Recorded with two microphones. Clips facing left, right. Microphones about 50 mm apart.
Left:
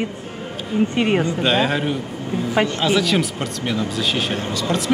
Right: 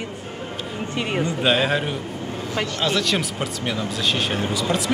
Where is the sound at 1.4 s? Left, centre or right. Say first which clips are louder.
Right 1 dB; centre.